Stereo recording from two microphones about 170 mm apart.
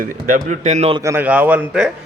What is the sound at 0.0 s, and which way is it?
Speech, 50° right (ahead or behind).